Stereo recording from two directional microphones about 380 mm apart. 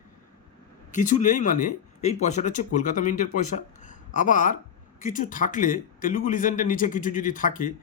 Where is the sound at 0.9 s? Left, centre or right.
Centre.